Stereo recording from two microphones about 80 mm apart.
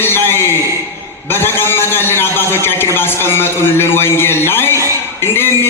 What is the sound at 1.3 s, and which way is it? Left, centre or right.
A man's voice, left.